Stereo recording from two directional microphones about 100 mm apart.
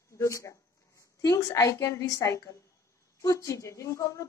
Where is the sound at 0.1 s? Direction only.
30° left (ahead or behind).